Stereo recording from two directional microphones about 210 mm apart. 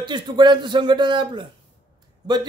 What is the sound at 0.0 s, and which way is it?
A man's voice, 20° right (ahead or behind).